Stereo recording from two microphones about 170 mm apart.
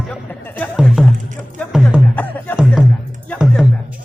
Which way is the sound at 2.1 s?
10° left (ahead or behind).